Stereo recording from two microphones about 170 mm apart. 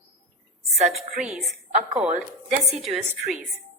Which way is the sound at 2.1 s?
45° right (ahead or behind).